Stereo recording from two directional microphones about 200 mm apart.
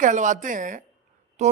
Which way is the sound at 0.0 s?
40° right (ahead or behind).